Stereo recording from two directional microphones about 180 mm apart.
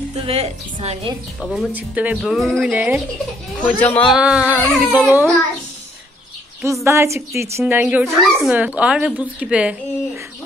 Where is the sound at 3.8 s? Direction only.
5° left (ahead or behind).